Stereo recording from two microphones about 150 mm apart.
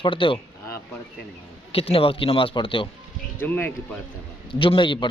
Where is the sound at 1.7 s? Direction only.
40° left (ahead or behind).